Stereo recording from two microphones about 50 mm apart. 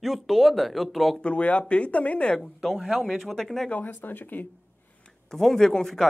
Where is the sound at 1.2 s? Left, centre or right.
Left.